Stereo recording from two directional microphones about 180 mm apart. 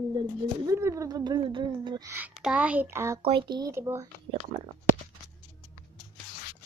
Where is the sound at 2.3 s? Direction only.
5° right (ahead or behind).